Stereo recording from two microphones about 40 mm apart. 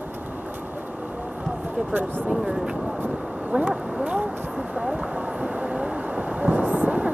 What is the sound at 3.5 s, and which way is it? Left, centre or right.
Speech, right.